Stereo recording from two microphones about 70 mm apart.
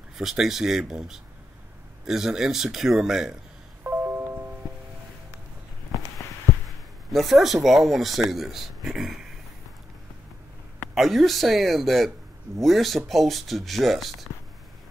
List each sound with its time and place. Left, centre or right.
0.2 s speech: centre
3.8 s music: right
7.1 s speech: centre
11.0 s speech: centre